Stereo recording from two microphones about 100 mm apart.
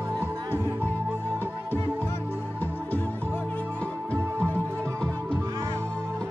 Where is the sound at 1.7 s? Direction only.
20° left (ahead or behind).